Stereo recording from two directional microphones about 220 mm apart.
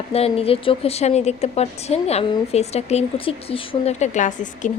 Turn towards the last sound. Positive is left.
turn(degrees=35)  # may be behind; listen again after turning